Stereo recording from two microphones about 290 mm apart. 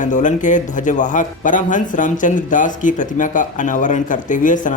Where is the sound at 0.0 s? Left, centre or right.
Left.